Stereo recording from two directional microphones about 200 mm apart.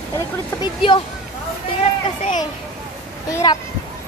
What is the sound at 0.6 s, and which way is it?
Speech, 25° left (ahead or behind).